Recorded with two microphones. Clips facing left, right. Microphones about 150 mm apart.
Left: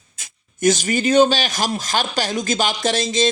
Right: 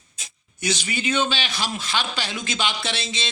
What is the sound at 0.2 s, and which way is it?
A woman's voice, 45° left (ahead or behind).